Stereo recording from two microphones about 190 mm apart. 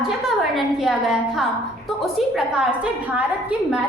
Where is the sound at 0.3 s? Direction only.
Centre (ahead or behind).